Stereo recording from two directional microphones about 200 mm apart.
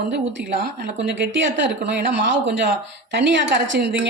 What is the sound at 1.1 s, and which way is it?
Speech, 60° right (ahead or behind).